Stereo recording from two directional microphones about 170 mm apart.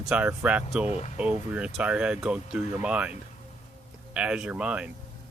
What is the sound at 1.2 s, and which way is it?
Speech, 5° right (ahead or behind).